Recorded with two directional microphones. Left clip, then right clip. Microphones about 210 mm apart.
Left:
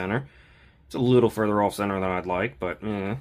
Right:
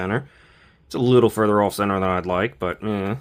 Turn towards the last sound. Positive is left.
turn(degrees=-30)  # may be behind; listen again after turning